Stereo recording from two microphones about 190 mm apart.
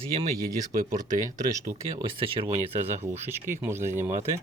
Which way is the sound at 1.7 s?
25° right (ahead or behind).